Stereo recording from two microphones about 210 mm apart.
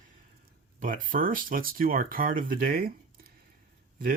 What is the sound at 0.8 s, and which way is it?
Speech, 40° right (ahead or behind).